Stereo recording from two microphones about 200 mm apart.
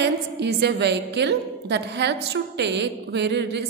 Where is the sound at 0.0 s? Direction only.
60° right (ahead or behind).